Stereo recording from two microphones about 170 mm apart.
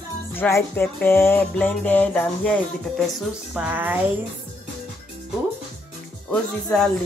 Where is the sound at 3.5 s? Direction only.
10° right (ahead or behind).